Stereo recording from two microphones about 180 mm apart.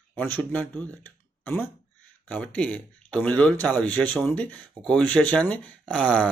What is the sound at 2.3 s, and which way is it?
Speech, 10° left (ahead or behind).